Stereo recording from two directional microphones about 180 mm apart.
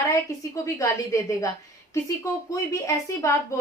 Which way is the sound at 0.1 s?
15° left (ahead or behind).